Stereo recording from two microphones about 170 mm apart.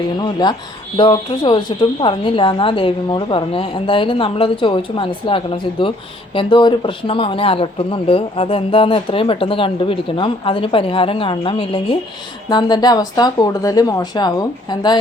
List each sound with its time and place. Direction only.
0.2 s speech: 25° left (ahead or behind)